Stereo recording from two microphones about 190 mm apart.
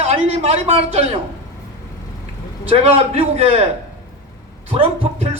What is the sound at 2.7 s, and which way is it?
Speech, 30° right (ahead or behind).